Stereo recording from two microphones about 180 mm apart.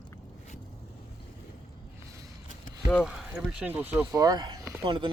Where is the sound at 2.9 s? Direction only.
Centre (ahead or behind).